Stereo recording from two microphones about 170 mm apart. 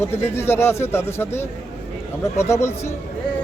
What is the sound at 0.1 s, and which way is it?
Speech, 15° left (ahead or behind).